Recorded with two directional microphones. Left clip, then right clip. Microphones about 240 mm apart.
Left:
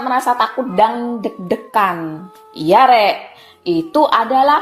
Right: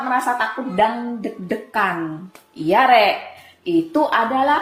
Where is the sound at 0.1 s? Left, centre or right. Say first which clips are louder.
Left 5 dB; left.